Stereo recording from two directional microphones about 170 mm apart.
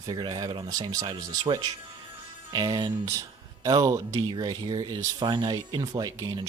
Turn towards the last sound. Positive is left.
turn(degrees=-25)  # may be behind; listen again after turning